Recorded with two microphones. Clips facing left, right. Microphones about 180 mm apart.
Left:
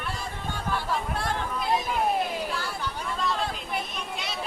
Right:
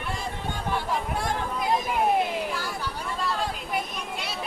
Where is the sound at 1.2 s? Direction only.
15° right (ahead or behind).